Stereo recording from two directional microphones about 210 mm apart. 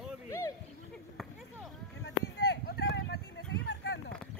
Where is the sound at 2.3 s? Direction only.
50° left (ahead or behind).